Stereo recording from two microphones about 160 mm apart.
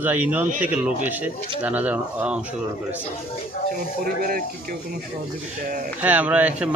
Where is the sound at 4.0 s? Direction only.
60° right (ahead or behind).